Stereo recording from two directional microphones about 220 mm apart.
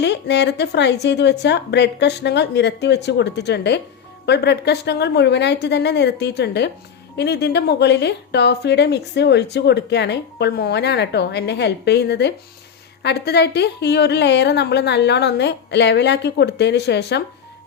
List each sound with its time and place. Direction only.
0.0 s speech: 50° left (ahead or behind)